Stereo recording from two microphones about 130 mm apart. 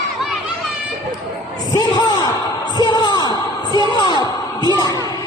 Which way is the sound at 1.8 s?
30° left (ahead or behind).